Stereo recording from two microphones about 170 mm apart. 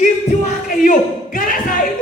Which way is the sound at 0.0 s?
50° left (ahead or behind).